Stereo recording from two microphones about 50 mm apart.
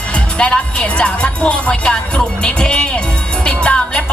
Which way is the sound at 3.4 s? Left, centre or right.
Left.